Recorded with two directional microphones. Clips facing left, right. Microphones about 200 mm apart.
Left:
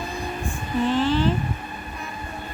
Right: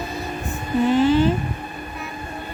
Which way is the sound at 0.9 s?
10° right (ahead or behind).